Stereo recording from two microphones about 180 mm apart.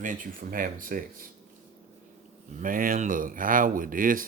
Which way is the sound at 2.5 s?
50° right (ahead or behind).